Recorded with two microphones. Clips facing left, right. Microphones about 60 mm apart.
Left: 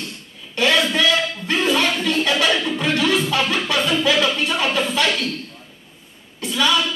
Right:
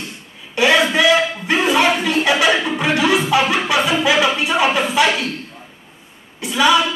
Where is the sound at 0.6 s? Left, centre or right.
Centre.